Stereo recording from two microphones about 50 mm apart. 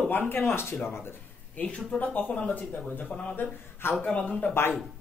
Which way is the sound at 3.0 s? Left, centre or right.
Left.